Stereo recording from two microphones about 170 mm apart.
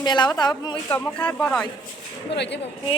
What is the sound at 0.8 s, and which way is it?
Speech, 10° left (ahead or behind).